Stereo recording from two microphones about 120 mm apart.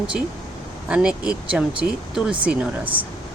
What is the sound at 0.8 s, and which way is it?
Speech, 10° right (ahead or behind).